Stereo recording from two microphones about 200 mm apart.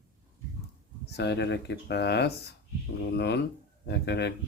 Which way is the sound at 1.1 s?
55° left (ahead or behind).